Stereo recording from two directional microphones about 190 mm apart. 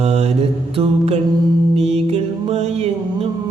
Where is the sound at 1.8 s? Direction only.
35° right (ahead or behind).